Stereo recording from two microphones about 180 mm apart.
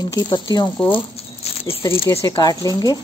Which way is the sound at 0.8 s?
30° left (ahead or behind).